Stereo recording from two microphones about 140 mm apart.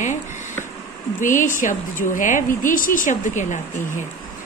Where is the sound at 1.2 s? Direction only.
65° left (ahead or behind).